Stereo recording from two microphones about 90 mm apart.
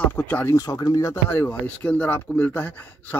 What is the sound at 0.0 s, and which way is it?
Speech, 20° left (ahead or behind).